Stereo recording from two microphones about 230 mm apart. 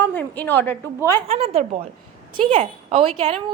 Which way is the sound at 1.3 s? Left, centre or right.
Right.